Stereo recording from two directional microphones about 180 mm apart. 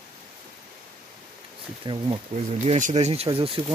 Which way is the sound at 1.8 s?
30° right (ahead or behind).